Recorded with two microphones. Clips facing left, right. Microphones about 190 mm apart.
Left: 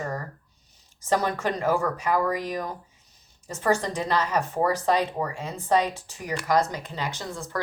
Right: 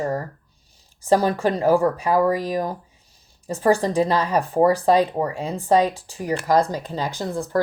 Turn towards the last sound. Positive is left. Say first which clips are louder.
# right 9 dB
turn(degrees=-35)  # may be behind; listen again after turning